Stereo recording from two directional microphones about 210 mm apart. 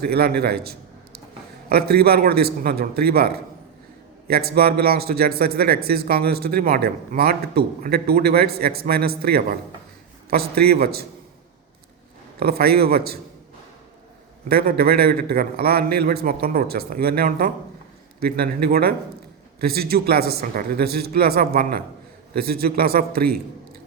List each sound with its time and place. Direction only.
0.0 s a man's voice: 45° right (ahead or behind)
12.4 s speech: 45° right (ahead or behind)
14.4 s speech: 45° right (ahead or behind)